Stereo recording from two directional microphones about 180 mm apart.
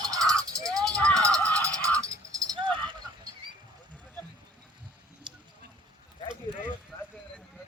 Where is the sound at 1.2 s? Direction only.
20° right (ahead or behind).